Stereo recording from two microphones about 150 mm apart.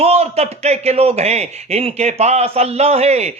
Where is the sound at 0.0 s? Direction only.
45° right (ahead or behind).